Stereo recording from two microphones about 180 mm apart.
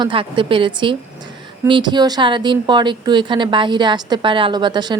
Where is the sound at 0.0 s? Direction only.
30° right (ahead or behind).